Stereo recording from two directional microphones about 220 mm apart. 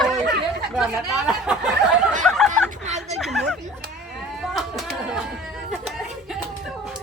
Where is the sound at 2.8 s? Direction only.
30° right (ahead or behind).